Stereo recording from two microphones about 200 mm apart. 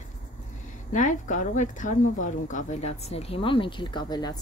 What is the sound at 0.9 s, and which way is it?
Speech, 40° left (ahead or behind).